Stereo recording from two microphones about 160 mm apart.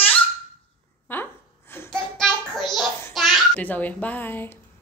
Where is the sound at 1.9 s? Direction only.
5° left (ahead or behind).